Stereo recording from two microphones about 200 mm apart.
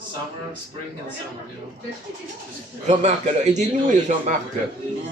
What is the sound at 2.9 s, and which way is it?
A man's voice, 35° right (ahead or behind).